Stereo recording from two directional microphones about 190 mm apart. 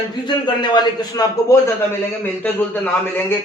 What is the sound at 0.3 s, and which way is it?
A man's voice, 25° left (ahead or behind).